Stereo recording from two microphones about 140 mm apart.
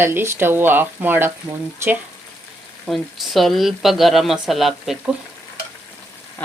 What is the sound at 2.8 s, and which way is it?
Speech, centre (ahead or behind).